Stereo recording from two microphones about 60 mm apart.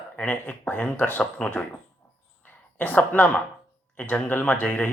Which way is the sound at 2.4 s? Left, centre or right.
Left.